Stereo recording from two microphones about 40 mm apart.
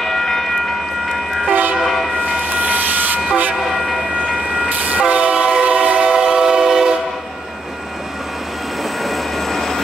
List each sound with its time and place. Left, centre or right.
0.0 s train: centre
1.5 s train horn: right
1.8 s train horn: centre
2.5 s train: right
3.5 s train: centre
4.6 s train: right
5.0 s train: right; by 7.0 s centre
9.0 s train: centre